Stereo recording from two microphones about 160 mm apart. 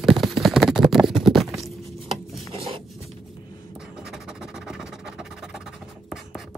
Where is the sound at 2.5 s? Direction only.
35° right (ahead or behind).